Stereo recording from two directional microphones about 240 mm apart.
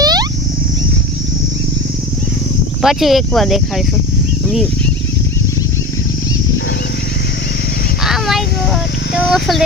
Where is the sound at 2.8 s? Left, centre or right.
Centre.